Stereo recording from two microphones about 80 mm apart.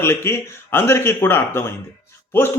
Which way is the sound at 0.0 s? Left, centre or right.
Left.